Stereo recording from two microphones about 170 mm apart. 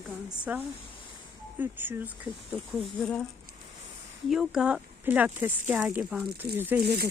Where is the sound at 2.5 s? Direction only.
Centre (ahead or behind).